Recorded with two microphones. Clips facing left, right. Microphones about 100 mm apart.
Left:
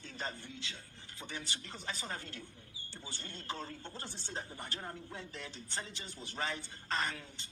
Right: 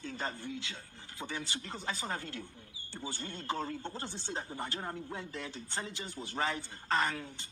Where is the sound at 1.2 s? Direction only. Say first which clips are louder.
Right 5 dB; 35° right (ahead or behind).